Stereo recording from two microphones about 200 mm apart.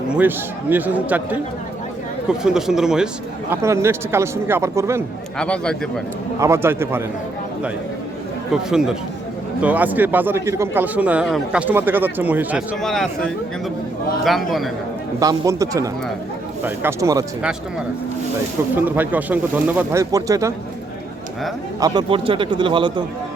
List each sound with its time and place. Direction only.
0.1 s a man's voice: 10° right (ahead or behind)
2.4 s speech: 5° right (ahead or behind)
3.5 s a man's voice: 15° right (ahead or behind)
5.4 s speech: 5° left (ahead or behind)
6.4 s a man's voice: 10° right (ahead or behind)
8.5 s a man's voice: 5° right (ahead or behind)
15.2 s a man's voice: 15° right (ahead or behind)
18.9 s a man's voice: 10° right (ahead or behind)
21.8 s a man's voice: 20° right (ahead or behind)